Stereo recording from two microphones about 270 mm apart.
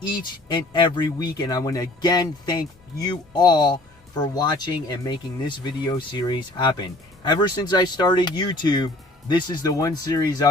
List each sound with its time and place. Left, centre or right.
0.0 s speech: centre